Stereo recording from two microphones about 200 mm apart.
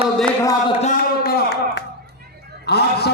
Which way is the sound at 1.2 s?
50° left (ahead or behind).